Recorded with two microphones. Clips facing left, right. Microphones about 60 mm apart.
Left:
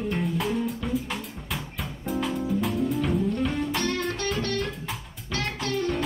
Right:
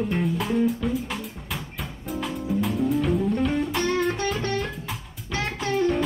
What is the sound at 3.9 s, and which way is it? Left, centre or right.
Music, centre.